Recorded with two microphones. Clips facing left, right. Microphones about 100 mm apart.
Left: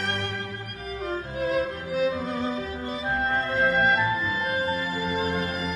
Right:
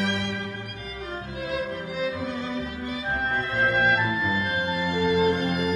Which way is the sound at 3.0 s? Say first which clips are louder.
Left 2 dB; centre (ahead or behind).